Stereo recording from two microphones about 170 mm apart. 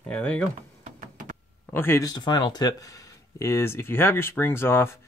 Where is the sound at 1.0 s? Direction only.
50° right (ahead or behind).